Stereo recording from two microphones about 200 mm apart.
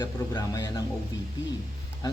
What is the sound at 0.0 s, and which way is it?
Speech, 20° left (ahead or behind).